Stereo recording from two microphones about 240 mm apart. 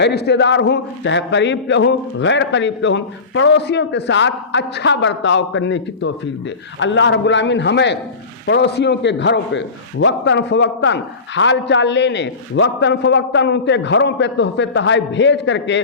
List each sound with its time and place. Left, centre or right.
0.0 s a man's voice: left